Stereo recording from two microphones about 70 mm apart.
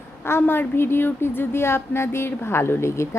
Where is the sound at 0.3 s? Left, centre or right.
Left.